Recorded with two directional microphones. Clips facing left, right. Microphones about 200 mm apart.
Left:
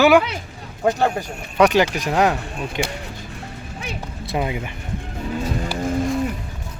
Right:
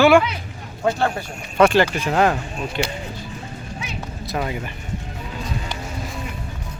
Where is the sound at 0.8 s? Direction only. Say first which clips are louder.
Left 2 dB; 15° left (ahead or behind).